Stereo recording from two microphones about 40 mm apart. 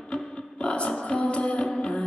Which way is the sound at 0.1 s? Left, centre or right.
Left.